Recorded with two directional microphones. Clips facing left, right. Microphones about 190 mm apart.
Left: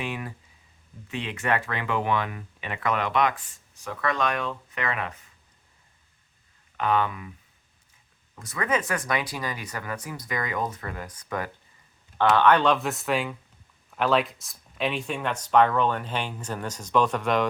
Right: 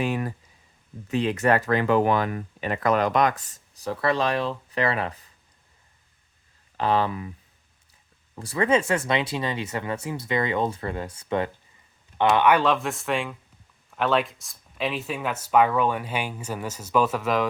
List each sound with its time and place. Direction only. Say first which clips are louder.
0.0 s speech: right 7 dB; 40° right (ahead or behind)
6.7 s speech: right 2 dB; 30° right (ahead or behind)
8.4 s speech: right 5 dB; 30° right (ahead or behind); by 17.5 s centre (ahead or behind)